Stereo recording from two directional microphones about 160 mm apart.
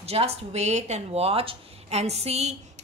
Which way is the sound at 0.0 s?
40° right (ahead or behind).